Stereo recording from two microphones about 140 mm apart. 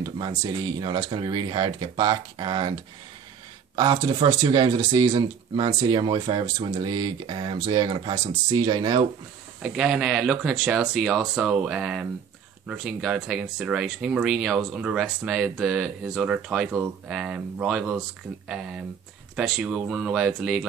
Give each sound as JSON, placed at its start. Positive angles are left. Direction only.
{"t": 0.2, "sound": "speech", "side_deg": -30}
{"t": 3.7, "sound": "speech", "side_deg": -35}
{"t": 9.6, "sound": "speech", "side_deg": -5}